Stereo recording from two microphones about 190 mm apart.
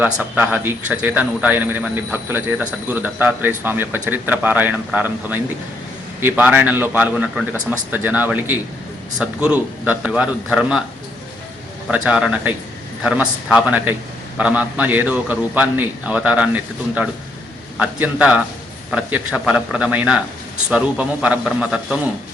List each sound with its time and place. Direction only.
0.0 s a man's voice: 10° right (ahead or behind)
11.9 s a man's voice: 5° right (ahead or behind)
17.7 s a man's voice: 5° right (ahead or behind)